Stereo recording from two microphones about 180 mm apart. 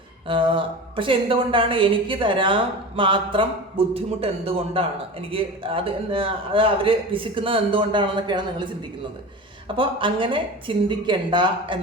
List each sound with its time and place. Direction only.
0.3 s a woman's voice: 30° right (ahead or behind)